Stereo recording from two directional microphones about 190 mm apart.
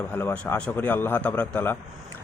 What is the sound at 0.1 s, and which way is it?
Speech, 10° left (ahead or behind).